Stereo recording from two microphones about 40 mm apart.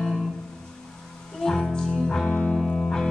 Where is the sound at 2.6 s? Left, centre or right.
Centre.